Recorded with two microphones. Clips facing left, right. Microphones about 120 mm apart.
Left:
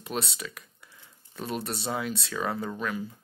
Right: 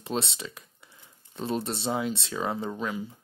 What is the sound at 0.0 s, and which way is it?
Speech, 25° right (ahead or behind).